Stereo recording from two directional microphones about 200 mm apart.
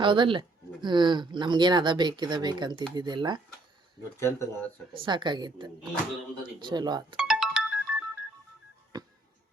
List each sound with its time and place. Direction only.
0.0 s speech: 25° right (ahead or behind)
4.2 s speech: 15° left (ahead or behind)
4.9 s speech: 25° right (ahead or behind)
7.2 s ringtone: centre (ahead or behind)
8.9 s music: 20° right (ahead or behind)